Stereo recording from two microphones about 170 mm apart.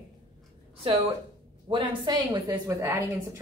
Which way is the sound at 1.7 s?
25° right (ahead or behind).